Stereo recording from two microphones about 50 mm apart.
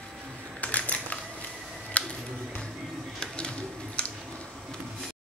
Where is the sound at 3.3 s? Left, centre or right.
Left.